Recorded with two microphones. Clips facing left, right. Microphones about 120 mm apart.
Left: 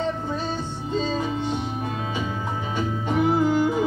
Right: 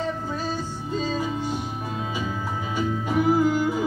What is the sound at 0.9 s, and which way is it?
Music, 25° left (ahead or behind).